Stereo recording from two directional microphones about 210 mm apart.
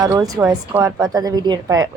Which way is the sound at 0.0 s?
15° right (ahead or behind).